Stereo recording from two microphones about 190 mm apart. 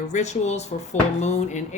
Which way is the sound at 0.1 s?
35° left (ahead or behind).